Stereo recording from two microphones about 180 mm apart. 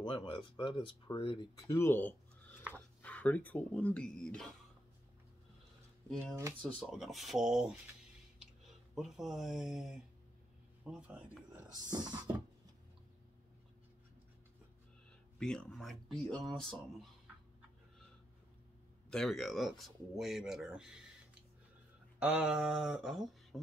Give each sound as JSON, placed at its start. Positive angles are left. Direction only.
{"t": 0.0, "sound": "speech", "side_deg": 25}
{"t": 1.8, "sound": "speech", "side_deg": 10}
{"t": 6.3, "sound": "speech", "side_deg": -15}
{"t": 6.8, "sound": "speech", "side_deg": 0}
{"t": 8.9, "sound": "speech", "side_deg": 0}
{"t": 11.9, "sound": "a sound", "side_deg": -20}
{"t": 15.3, "sound": "speech", "side_deg": 5}
{"t": 19.0, "sound": "speech", "side_deg": 5}